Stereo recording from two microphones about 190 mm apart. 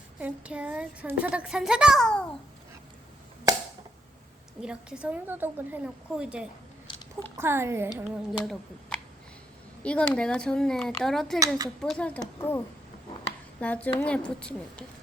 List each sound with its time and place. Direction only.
0.2 s speech: 5° right (ahead or behind)
3.5 s a sound: 20° right (ahead or behind)
4.6 s speech: 5° right (ahead or behind)
7.9 s speech: centre (ahead or behind)
9.8 s speech: 5° left (ahead or behind)
11.3 s speech: 20° right (ahead or behind)
11.8 s a woman's voice: 5° left (ahead or behind)